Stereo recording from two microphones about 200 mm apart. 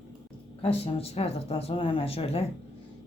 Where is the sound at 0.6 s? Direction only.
30° left (ahead or behind).